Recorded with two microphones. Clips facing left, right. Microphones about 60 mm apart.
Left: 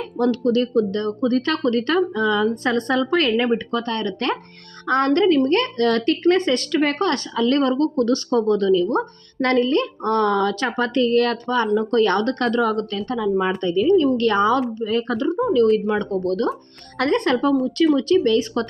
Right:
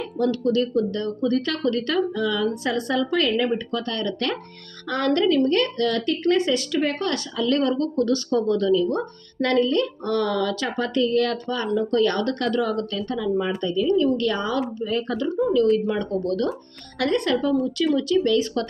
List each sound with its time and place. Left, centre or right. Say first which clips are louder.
0.2 s speech: left 3 dB; left
7.1 s speech: left 3 dB; left